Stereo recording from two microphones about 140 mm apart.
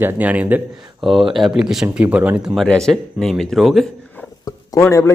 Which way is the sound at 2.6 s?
5° left (ahead or behind).